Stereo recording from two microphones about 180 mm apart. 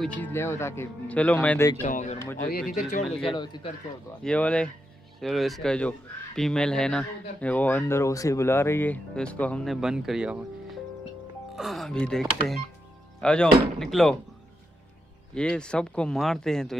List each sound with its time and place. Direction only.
0.0 s speech: 10° left (ahead or behind)
1.8 s speech: 40° left (ahead or behind)
3.3 s speech: 25° left (ahead or behind)
4.2 s speech: 5° left (ahead or behind)
9.8 s speech: 5° right (ahead or behind)
11.5 s speech: centre (ahead or behind)
15.3 s speech: 5° left (ahead or behind)